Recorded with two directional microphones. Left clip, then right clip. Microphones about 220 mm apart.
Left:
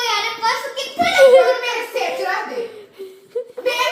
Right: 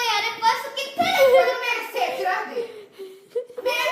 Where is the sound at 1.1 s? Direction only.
10° left (ahead or behind).